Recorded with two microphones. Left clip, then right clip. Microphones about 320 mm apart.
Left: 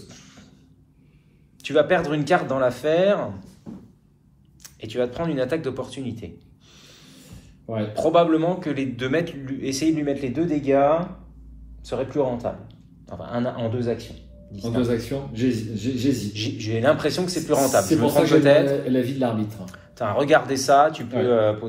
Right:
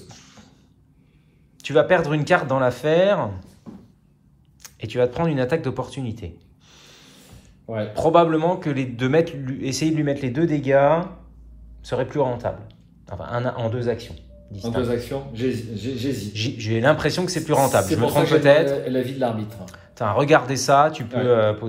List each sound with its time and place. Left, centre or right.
0.1 s a sound: centre
1.6 s a man's voice: centre
4.6 s a man's voice: centre
6.8 s a sound: right
7.6 s a man's voice: right
18.4 s a man's voice: centre
19.4 s a man's voice: centre